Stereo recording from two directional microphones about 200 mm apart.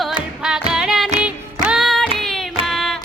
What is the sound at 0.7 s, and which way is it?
Music, 5° right (ahead or behind).